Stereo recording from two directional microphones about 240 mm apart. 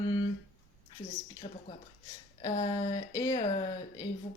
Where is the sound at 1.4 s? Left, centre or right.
Left.